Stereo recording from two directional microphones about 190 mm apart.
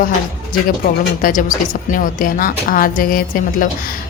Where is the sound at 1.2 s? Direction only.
45° left (ahead or behind).